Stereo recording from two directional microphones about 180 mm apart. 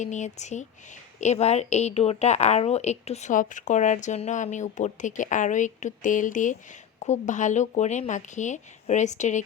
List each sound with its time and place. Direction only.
0.0 s a woman's voice: 40° left (ahead or behind)